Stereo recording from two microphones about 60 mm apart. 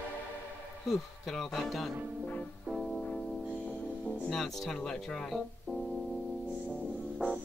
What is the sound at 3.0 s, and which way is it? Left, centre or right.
Music, centre.